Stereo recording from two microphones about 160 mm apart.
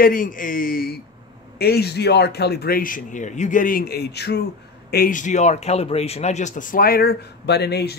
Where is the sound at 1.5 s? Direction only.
85° left.